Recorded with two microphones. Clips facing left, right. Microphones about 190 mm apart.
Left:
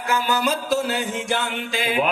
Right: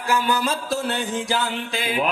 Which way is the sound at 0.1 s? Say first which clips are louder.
Even; 30° right (ahead or behind).